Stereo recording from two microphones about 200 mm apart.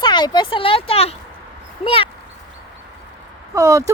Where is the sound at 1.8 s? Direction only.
25° left (ahead or behind).